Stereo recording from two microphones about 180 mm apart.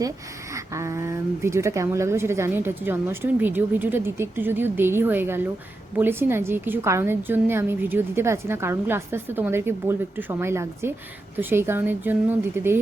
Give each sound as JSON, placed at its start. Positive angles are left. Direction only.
{"t": 0.5, "sound": "speech", "side_deg": -15}